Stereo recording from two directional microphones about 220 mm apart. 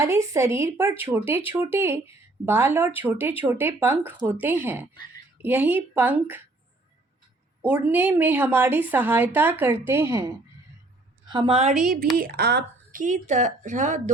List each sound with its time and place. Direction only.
0.0 s a woman's voice: 15° right (ahead or behind)
7.7 s a woman's voice: 10° right (ahead or behind); by 11.7 s 25° right (ahead or behind)
12.1 s speech: 45° right (ahead or behind)